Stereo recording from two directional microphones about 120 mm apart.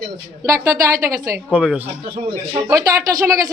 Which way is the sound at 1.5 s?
10° right (ahead or behind).